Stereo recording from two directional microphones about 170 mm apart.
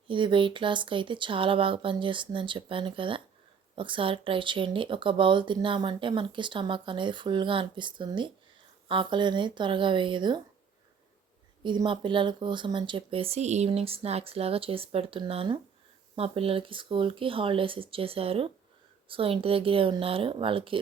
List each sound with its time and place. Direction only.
0.1 s speech: 30° right (ahead or behind)
11.6 s speech: 25° right (ahead or behind)